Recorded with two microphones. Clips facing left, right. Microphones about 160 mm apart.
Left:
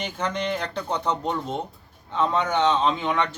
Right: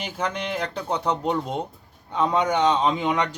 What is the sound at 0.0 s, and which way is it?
A man's voice, 10° right (ahead or behind).